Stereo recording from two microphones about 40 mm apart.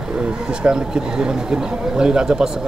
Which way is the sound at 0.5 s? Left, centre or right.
Right.